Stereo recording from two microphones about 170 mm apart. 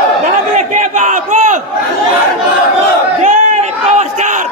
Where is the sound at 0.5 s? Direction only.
45° right (ahead or behind).